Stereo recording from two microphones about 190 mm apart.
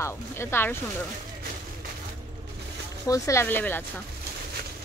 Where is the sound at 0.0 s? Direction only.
15° left (ahead or behind).